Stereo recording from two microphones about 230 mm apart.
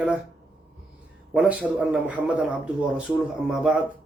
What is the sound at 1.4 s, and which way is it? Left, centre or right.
A man's voice, centre.